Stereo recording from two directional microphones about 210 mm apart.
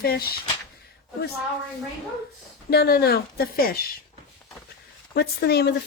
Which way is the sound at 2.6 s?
50° left (ahead or behind).